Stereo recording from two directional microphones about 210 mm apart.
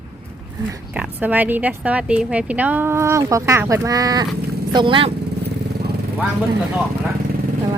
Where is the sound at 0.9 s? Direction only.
5° right (ahead or behind); by 5.1 s 25° right (ahead or behind).